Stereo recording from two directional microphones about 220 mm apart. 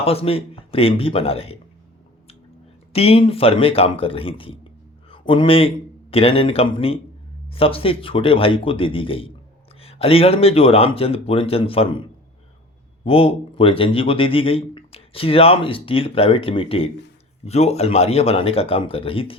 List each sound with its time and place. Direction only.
0.0 s a man's voice: 25° left (ahead or behind)
2.9 s a man's voice: 25° left (ahead or behind)
13.1 s a man's voice: 25° left (ahead or behind)